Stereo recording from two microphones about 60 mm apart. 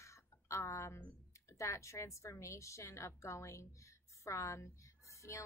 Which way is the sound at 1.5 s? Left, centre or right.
Left.